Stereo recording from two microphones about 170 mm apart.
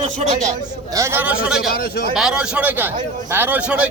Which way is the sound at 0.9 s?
15° right (ahead or behind).